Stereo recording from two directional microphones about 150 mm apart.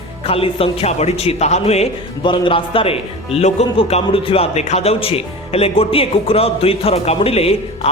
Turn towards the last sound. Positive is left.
turn(degrees=40)  # may be behind; listen again after turning